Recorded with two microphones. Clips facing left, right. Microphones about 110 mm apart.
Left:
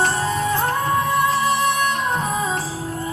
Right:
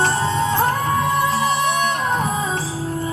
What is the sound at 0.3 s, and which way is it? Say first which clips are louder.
Music: right 2 dB; 25° right (ahead or behind).